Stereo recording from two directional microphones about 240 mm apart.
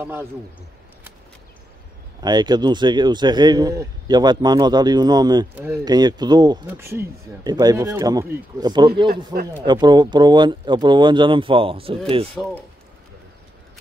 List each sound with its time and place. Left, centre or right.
0.0 s a man's voice: centre
2.2 s a man's voice: centre
9.1 s speech: right
9.7 s speech: centre
12.4 s speech: centre